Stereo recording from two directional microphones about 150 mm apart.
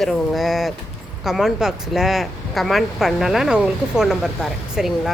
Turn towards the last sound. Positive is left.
turn(degrees=-5)  # may be behind; listen again after turning